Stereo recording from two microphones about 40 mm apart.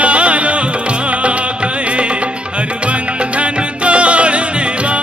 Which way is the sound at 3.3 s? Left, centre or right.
Right.